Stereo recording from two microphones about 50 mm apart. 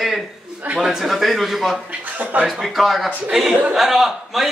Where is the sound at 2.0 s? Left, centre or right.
Right.